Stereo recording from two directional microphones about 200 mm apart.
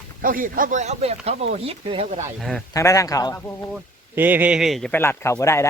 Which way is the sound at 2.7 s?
15° left (ahead or behind).